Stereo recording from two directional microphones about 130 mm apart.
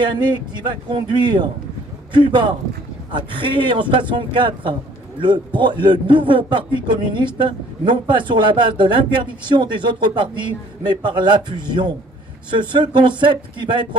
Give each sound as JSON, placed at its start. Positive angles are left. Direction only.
{"t": 0.0, "sound": "a man's voice", "side_deg": -35}